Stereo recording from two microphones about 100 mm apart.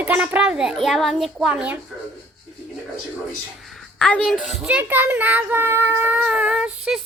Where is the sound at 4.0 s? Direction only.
10° left (ahead or behind).